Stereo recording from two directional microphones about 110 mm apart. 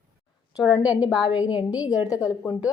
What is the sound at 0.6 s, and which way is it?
Speech, 40° left (ahead or behind).